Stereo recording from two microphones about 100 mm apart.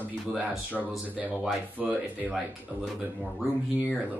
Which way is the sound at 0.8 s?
15° right (ahead or behind).